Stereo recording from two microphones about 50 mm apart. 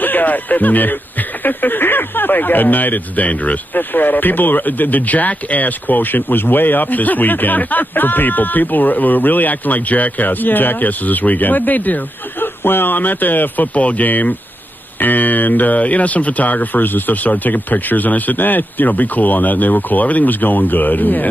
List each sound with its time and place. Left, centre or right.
0.0 s speech: left